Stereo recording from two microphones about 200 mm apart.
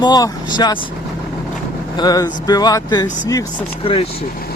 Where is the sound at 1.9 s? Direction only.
20° left (ahead or behind).